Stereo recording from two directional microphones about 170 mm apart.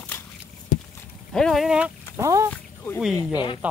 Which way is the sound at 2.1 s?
20° right (ahead or behind).